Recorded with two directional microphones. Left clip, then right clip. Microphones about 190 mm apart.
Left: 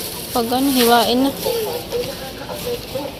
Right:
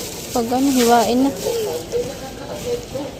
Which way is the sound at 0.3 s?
10° right (ahead or behind).